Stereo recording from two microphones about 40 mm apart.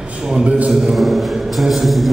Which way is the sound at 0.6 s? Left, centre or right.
Centre.